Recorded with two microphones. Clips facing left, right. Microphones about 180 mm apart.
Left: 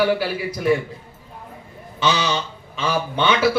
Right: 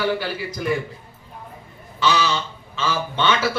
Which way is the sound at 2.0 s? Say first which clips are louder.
Even; 20° left (ahead or behind).